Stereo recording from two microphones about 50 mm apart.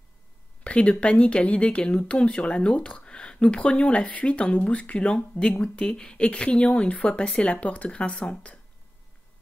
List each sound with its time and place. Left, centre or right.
0.7 s speech: left